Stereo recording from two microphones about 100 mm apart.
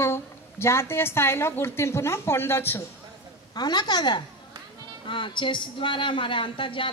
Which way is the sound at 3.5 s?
45° left (ahead or behind).